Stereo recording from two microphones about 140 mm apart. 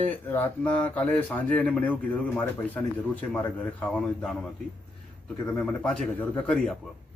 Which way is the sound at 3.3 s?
10° left (ahead or behind).